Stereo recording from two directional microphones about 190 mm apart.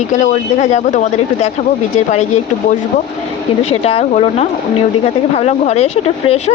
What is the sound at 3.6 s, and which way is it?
Speech, 35° left (ahead or behind).